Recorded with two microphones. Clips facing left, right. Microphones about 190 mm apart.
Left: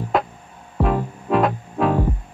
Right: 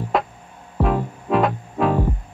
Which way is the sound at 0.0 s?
Centre (ahead or behind).